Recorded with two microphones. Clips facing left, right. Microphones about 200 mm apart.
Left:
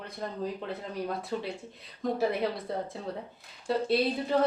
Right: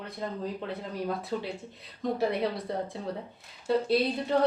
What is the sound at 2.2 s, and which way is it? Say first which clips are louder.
Speech: right 1 dB; centre (ahead or behind).